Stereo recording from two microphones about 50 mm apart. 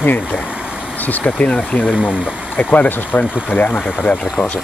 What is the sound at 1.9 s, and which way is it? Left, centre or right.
Speech, right.